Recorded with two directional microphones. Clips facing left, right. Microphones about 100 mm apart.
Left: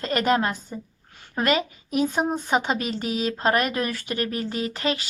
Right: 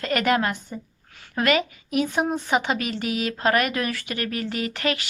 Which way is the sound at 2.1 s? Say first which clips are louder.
Even; 45° left (ahead or behind).